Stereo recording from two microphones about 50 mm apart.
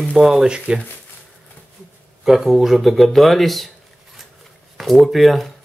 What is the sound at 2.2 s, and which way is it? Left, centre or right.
Speech, centre.